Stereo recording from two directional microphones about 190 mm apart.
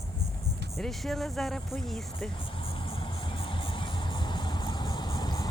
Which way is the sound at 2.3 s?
25° left (ahead or behind).